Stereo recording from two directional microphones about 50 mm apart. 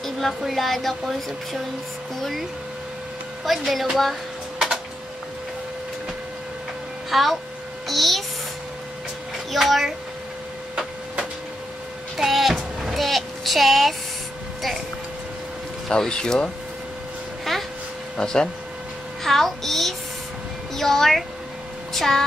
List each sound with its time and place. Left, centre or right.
0.0 s speech: centre
3.4 s speech: centre
7.1 s a child's voice: centre
9.5 s speech: centre
12.2 s a sound: centre
15.9 s speech: centre
18.1 s speech: centre
19.2 s child singing: centre
20.7 s speech: centre